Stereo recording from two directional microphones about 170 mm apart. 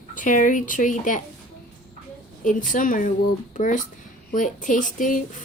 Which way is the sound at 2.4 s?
50° left (ahead or behind).